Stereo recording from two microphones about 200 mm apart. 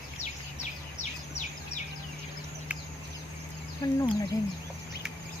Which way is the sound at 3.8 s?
15° left (ahead or behind).